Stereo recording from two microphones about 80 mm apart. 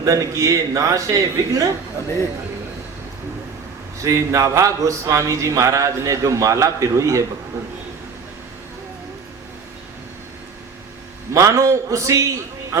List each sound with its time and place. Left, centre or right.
0.0 s a man's voice: right
4.0 s speech: right
11.3 s speech: right